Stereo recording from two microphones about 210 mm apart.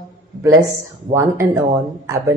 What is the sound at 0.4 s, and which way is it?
Speech, 15° right (ahead or behind).